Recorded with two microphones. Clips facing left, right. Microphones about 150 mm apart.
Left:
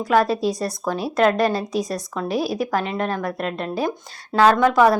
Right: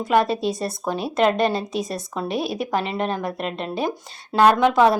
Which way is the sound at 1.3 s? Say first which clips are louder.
Left 1 dB; 25° right (ahead or behind).